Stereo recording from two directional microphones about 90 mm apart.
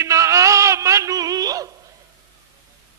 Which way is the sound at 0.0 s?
35° right (ahead or behind).